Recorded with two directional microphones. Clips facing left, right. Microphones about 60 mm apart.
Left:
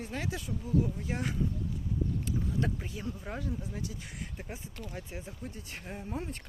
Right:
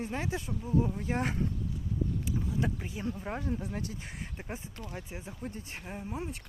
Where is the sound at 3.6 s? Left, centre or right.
Right.